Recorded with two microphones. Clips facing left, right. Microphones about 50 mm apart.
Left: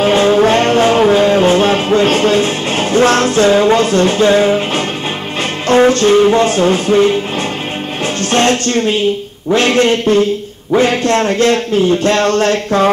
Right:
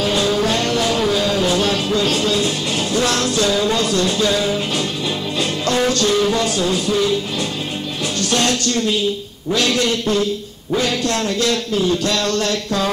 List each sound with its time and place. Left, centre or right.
0.0 s music: left
5.7 s speech: left
8.3 s speech: left